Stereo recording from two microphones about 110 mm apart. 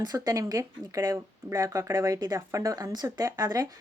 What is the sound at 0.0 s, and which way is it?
Speech, 35° right (ahead or behind).